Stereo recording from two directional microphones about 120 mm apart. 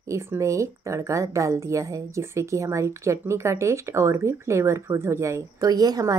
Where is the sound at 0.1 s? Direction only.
25° right (ahead or behind).